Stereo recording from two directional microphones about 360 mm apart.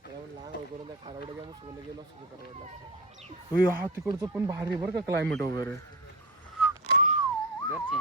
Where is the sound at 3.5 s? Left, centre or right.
Centre.